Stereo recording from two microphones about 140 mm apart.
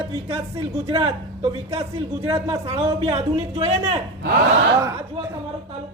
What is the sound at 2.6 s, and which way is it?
Speech, 45° right (ahead or behind).